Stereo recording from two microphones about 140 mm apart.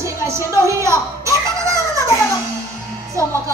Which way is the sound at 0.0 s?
20° right (ahead or behind).